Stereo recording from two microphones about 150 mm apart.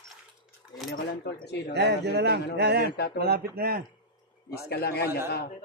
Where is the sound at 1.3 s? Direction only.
90° left.